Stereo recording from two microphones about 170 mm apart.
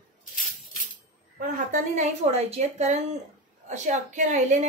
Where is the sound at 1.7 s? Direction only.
40° right (ahead or behind).